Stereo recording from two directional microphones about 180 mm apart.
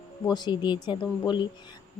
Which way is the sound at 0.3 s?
25° left (ahead or behind).